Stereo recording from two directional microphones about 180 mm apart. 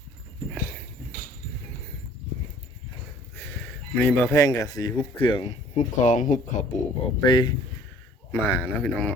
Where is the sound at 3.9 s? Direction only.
10° left (ahead or behind); by 6.8 s 40° left (ahead or behind).